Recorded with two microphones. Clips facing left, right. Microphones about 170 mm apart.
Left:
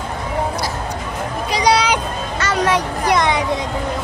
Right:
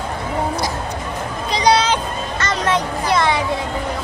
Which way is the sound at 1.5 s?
10° left (ahead or behind).